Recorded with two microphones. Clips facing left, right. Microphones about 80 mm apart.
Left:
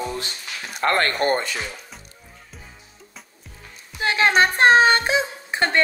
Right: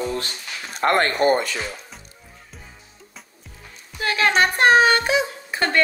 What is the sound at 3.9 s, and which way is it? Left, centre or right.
A woman's voice, left.